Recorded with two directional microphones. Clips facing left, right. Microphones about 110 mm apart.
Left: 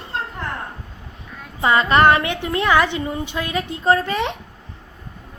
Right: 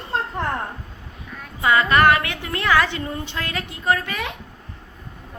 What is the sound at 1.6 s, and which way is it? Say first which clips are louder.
A woman's voice: left 2 dB; 25° left (ahead or behind).